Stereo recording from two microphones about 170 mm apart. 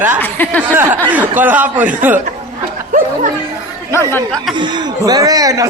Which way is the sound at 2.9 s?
50° right (ahead or behind).